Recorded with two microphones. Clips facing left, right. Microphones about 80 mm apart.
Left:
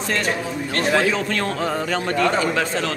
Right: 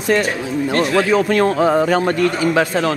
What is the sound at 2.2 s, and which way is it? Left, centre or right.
Speech, centre.